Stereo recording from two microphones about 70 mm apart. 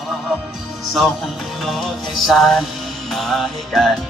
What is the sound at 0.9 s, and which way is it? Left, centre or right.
Music, centre.